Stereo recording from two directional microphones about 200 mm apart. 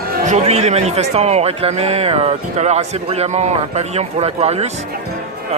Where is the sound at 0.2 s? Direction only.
35° right (ahead or behind).